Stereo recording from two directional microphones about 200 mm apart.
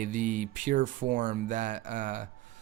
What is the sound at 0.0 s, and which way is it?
Speech, 40° right (ahead or behind).